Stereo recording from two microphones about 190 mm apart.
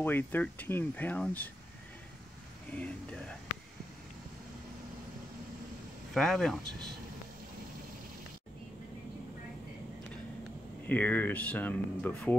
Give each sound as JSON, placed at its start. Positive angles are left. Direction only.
{"t": 0.0, "sound": "speech", "side_deg": 10}
{"t": 2.7, "sound": "speech", "side_deg": 5}
{"t": 6.1, "sound": "speech", "side_deg": 0}
{"t": 10.9, "sound": "speech", "side_deg": 10}